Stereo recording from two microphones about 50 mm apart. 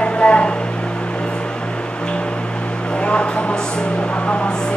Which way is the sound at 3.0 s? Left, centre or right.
Left.